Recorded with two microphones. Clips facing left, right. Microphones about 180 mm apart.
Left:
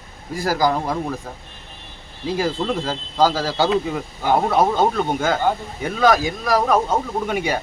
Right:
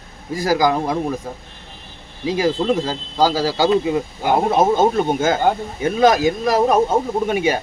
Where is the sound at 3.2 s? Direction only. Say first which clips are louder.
Right 1 dB; 40° right (ahead or behind).